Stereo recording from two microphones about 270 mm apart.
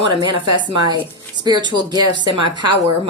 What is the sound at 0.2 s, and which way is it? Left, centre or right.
Speech, centre.